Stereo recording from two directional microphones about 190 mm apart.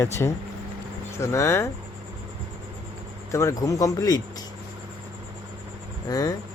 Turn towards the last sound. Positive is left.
turn(degrees=20)  # may be behind; listen again after turning